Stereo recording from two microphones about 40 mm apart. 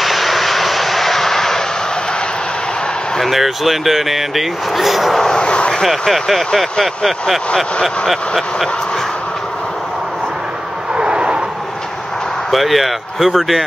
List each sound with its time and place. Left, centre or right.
0.0 s vehicle: centre
3.2 s speech: centre
5.2 s vehicle: left
5.9 s speech: centre
11.0 s vehicle: right
12.4 s speech: centre